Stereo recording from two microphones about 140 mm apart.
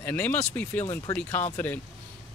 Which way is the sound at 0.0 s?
10° left (ahead or behind).